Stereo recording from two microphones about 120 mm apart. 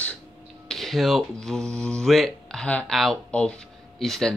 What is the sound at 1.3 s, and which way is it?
Speech, 5° left (ahead or behind).